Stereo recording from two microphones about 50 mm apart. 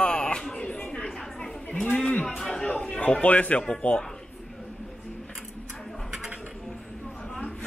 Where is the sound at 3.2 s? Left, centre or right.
Left.